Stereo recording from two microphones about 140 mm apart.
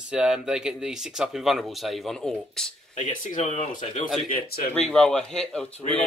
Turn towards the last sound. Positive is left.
turn(degrees=5)  # may be behind; listen again after turning